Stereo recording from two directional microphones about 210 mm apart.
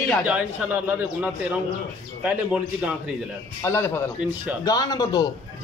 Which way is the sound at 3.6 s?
10° left (ahead or behind).